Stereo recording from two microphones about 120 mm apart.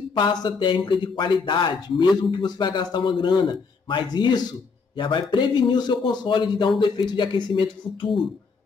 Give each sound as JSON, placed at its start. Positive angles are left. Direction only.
{"t": 0.1, "sound": "a man's voice", "side_deg": 35}